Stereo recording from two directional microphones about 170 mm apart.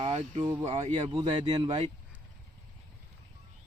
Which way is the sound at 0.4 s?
20° right (ahead or behind).